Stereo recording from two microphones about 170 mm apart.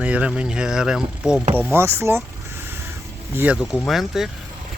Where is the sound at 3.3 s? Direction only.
10° right (ahead or behind).